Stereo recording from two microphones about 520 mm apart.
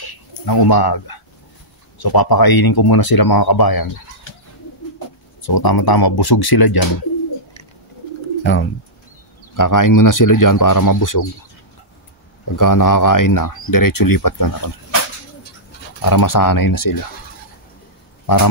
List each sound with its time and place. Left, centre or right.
0.0 s a sound: left
2.0 s speech: left
4.9 s speech: left
8.5 s speech: left
9.6 s speech: left
12.5 s speech: left
16.0 s speech: left
18.2 s a sound: left